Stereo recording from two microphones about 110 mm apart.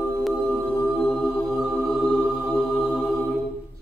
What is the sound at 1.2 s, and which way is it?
Music, centre (ahead or behind).